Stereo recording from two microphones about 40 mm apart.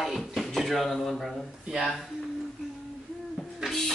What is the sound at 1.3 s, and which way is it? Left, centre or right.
Speech, centre.